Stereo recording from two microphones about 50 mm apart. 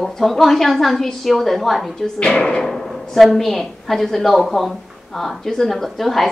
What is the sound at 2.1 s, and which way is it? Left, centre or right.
Speech, left.